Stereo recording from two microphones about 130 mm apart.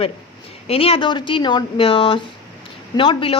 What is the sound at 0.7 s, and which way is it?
Speech, 45° left (ahead or behind).